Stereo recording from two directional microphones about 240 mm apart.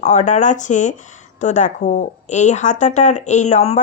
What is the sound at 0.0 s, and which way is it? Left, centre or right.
Speech, left.